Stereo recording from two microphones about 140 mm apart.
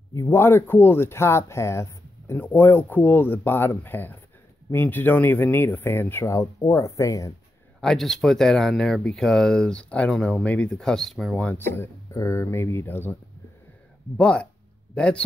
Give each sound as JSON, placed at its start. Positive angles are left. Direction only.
{"t": 0.1, "sound": "speech", "side_deg": 20}
{"t": 7.8, "sound": "speech", "side_deg": 5}